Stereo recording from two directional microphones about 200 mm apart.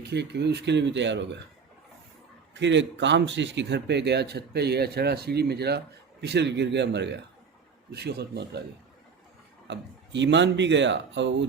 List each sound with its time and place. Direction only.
0.1 s speech: 55° right (ahead or behind)
2.6 s speech: 60° right (ahead or behind)
9.6 s speech: 60° right (ahead or behind)